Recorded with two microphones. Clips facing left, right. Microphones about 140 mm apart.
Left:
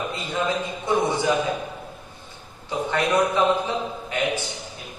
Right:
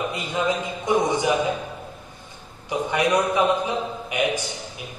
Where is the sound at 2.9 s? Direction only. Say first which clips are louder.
Even; 15° right (ahead or behind).